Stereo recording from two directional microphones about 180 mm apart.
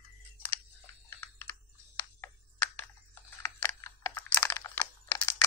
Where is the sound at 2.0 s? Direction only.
15° left (ahead or behind).